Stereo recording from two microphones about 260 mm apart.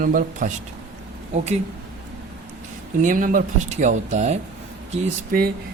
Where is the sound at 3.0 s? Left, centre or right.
Right.